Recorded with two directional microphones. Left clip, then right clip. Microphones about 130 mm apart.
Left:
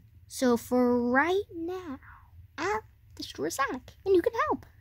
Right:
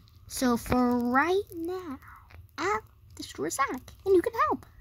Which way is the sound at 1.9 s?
Centre (ahead or behind).